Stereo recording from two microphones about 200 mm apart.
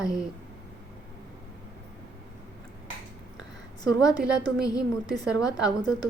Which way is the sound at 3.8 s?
20° left (ahead or behind).